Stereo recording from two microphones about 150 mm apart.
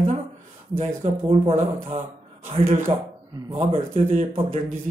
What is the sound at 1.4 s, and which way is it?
Speech, 50° right (ahead or behind).